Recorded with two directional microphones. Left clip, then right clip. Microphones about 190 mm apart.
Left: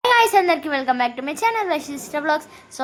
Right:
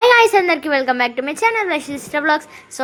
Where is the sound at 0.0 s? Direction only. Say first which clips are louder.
Right 4 dB; 15° right (ahead or behind).